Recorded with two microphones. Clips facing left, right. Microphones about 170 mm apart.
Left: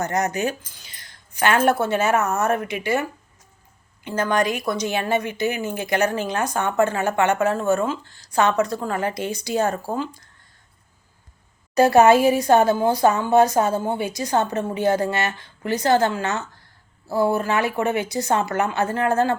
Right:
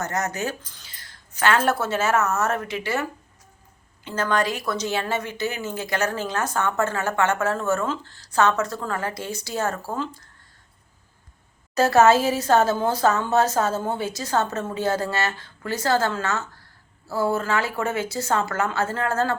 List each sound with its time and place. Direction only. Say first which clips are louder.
0.0 s a woman's voice: left 4 dB; 15° left (ahead or behind)
11.7 s a woman's voice: left 3 dB; 15° left (ahead or behind)